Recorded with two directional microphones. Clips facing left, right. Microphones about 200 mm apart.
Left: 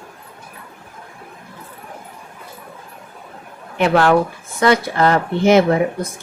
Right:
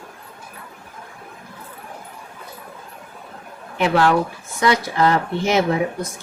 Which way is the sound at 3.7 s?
55° left (ahead or behind).